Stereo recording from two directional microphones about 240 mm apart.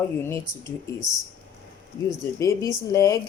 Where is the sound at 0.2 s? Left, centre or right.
Centre.